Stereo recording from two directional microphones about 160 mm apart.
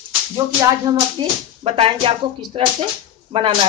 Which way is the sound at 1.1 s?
35° right (ahead or behind).